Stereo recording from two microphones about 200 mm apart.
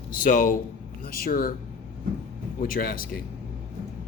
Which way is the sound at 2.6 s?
45° left (ahead or behind).